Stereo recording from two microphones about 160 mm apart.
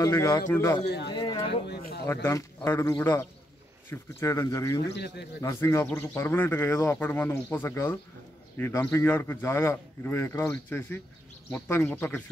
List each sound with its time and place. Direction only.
0.0 s speech: 20° left (ahead or behind)
0.8 s speech: 90° left
1.1 s a sound: 30° left (ahead or behind)
1.5 s speech: 80° left
2.2 s speech: 15° left (ahead or behind)
4.9 s speech: 90° left
5.4 s speech: 15° left (ahead or behind)